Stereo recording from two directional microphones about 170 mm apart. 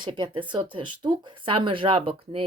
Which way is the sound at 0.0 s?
30° right (ahead or behind).